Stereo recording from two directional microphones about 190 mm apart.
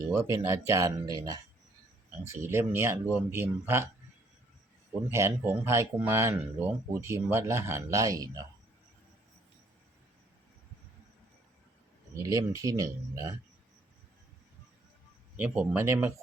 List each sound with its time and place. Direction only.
0.1 s speech: 15° right (ahead or behind)
5.0 s speech: 15° right (ahead or behind)
12.2 s speech: 20° right (ahead or behind)
15.4 s speech: 5° right (ahead or behind)